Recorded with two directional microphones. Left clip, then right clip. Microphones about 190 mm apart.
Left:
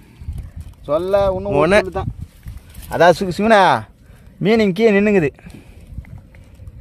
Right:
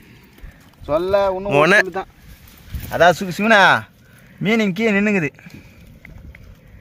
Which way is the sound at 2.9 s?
40° left (ahead or behind).